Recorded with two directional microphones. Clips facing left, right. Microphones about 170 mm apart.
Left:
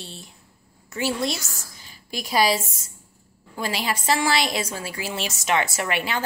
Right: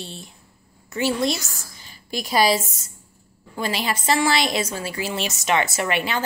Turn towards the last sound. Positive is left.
turn(degrees=5)  # may be behind; listen again after turning